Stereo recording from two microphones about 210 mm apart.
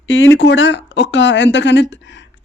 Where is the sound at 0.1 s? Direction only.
65° left (ahead or behind).